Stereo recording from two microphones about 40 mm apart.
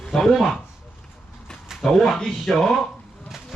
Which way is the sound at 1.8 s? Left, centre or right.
Centre.